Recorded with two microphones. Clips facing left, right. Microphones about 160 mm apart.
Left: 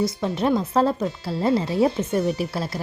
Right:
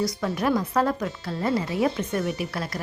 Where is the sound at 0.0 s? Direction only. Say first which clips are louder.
Left 3 dB; 25° left (ahead or behind).